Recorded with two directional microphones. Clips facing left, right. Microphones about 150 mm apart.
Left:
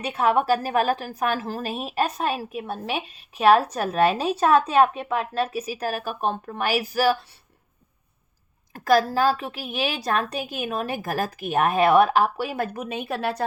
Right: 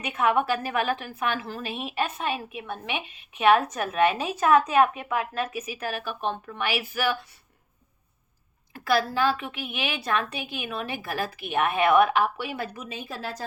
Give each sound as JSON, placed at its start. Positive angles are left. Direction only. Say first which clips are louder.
{"t": 0.0, "sound": "a woman's voice", "louder": "left 2 dB", "side_deg": 35}
{"t": 8.7, "sound": "a woman's voice", "louder": "left 5 dB", "side_deg": 40}